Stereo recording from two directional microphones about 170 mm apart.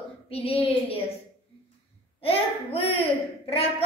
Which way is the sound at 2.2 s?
35° left (ahead or behind).